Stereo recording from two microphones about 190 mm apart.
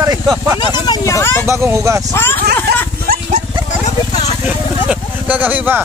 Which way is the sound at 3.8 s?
35° left (ahead or behind).